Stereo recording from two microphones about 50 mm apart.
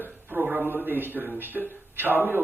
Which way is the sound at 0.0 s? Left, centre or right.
Right.